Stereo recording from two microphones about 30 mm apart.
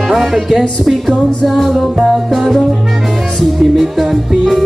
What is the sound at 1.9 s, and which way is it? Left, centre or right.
Music, right.